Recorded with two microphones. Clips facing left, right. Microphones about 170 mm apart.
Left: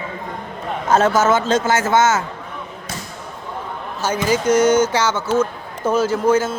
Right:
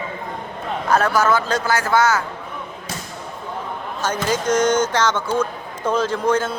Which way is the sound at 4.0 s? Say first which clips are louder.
Left 3 dB; 10° left (ahead or behind).